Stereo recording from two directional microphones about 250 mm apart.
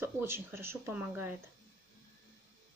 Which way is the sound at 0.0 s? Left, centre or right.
Centre.